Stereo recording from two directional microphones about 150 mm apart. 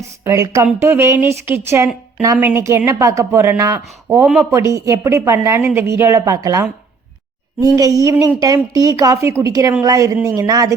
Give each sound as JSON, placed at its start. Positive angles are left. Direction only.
{"t": 0.3, "sound": "a woman's voice", "side_deg": -20}